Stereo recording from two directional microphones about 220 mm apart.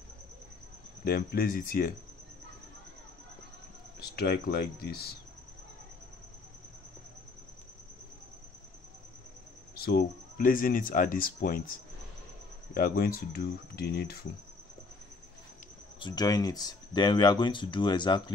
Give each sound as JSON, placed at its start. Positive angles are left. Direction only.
{"t": 1.0, "sound": "speech", "side_deg": 45}
{"t": 4.0, "sound": "speech", "side_deg": 45}
{"t": 9.8, "sound": "speech", "side_deg": 45}
{"t": 16.0, "sound": "speech", "side_deg": 20}